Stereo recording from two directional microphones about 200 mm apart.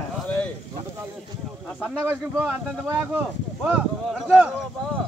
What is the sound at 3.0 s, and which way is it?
Speech, 10° right (ahead or behind).